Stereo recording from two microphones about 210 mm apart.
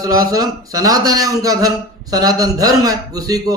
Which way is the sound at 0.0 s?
15° right (ahead or behind).